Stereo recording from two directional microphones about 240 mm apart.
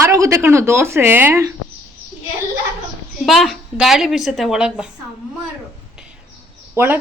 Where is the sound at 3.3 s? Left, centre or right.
Centre.